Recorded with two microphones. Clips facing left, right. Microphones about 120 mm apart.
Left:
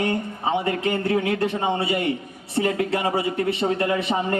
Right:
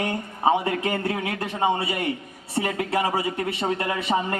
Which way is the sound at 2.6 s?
30° right (ahead or behind).